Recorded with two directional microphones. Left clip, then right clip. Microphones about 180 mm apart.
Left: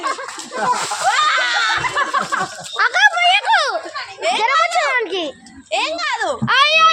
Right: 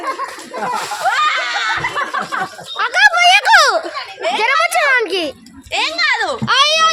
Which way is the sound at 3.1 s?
35° right (ahead or behind).